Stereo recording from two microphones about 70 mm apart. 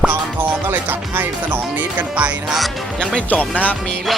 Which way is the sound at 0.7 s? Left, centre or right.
Right.